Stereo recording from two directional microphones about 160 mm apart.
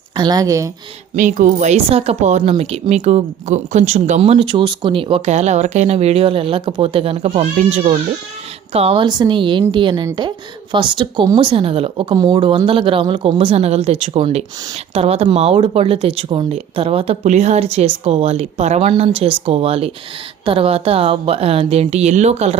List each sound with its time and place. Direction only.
0.2 s speech: 25° right (ahead or behind)
1.1 s speech: 55° right (ahead or behind)
9.0 s speech: 25° right (ahead or behind)